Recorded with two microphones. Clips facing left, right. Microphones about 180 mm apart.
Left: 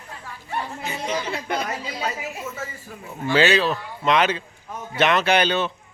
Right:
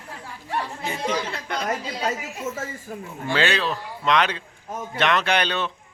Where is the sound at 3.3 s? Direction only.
5° left (ahead or behind).